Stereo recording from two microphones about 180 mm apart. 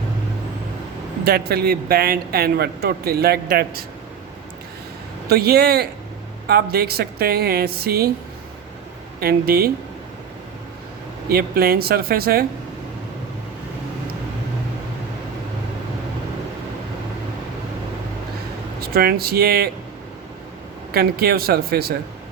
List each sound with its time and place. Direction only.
1.2 s speech: 60° right (ahead or behind)
5.3 s speech: 60° right (ahead or behind)
9.2 s speech: 60° right (ahead or behind)
11.3 s speech: 60° right (ahead or behind)
18.8 s speech: 60° right (ahead or behind)
20.9 s speech: 60° right (ahead or behind)